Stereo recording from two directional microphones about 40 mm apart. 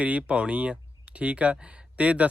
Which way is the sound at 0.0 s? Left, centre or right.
Right.